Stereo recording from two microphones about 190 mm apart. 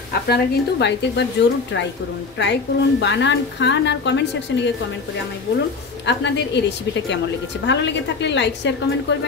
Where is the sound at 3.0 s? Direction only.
70° left (ahead or behind).